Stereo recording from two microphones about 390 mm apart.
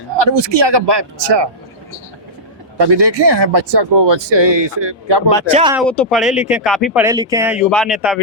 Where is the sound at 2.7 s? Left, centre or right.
Right.